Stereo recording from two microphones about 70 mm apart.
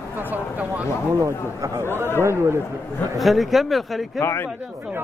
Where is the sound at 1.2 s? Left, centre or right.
Right.